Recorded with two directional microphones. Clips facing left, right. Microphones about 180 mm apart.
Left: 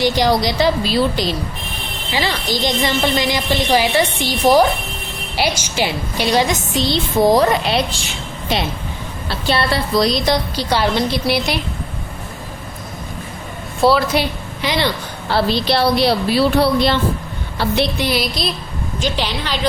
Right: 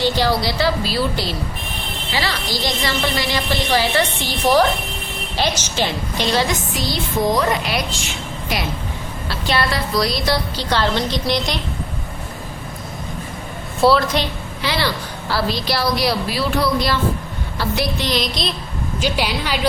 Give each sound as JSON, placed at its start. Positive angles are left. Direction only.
{"t": 0.0, "sound": "a woman's voice", "side_deg": 15}
{"t": 9.5, "sound": "a woman's voice", "side_deg": 30}
{"t": 13.8, "sound": "a woman's voice", "side_deg": 5}
{"t": 17.9, "sound": "a woman's voice", "side_deg": 10}
{"t": 18.9, "sound": "a woman's voice", "side_deg": -10}